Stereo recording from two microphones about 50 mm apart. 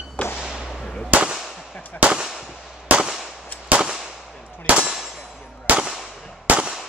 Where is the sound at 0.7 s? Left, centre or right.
Centre.